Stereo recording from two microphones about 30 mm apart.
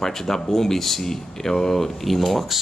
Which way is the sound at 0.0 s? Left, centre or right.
Centre.